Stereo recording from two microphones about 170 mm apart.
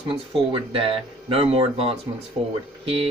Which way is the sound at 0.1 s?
30° right (ahead or behind).